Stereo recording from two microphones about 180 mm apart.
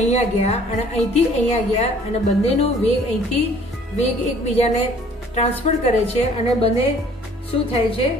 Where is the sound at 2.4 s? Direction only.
35° left (ahead or behind).